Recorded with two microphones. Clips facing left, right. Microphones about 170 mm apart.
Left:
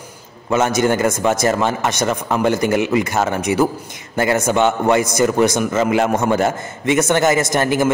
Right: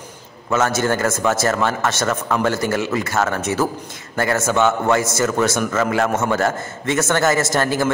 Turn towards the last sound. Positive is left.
turn(degrees=15)  # may be behind; listen again after turning